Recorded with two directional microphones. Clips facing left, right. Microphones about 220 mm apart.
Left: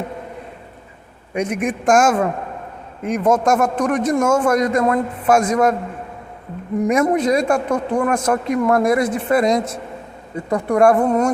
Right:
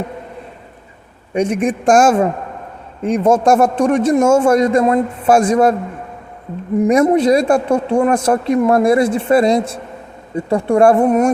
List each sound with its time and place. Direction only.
1.3 s speech: 30° right (ahead or behind)
6.7 s speech: 30° right (ahead or behind)